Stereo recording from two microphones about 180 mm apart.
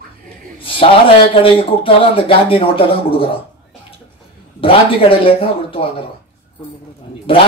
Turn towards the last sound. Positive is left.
turn(degrees=30)  # may be behind; listen again after turning